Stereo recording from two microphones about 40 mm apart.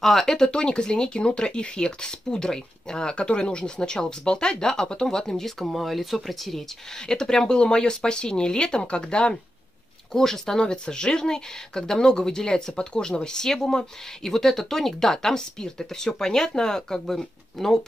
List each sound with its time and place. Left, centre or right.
0.0 s speech: centre
7.0 s speech: centre
10.1 s speech: centre